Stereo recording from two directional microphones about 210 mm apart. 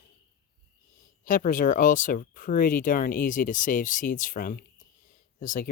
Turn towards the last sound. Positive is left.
turn(degrees=40)  # may be behind; listen again after turning